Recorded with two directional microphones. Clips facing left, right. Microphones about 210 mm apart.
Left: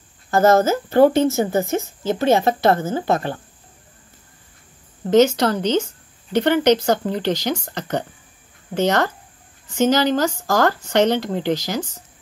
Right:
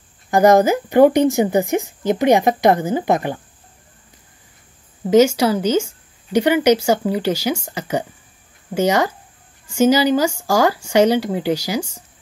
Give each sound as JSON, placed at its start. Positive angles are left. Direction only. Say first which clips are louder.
{"t": 0.3, "sound": "speech", "louder": "right 2 dB", "side_deg": -15}
{"t": 5.0, "sound": "speech", "louder": "right 2 dB", "side_deg": -10}